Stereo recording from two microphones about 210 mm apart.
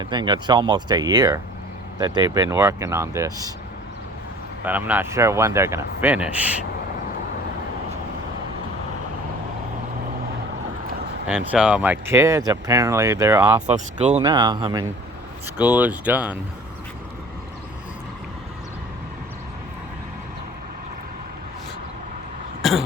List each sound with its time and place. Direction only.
0.0 s speech: 20° right (ahead or behind)
4.6 s speech: 10° right (ahead or behind)
11.3 s speech: 5° right (ahead or behind)
13.7 s speech: 35° right (ahead or behind)
14.2 s speech: 20° right (ahead or behind)
15.5 s speech: 5° right (ahead or behind)
22.6 s throat clearing: centre (ahead or behind)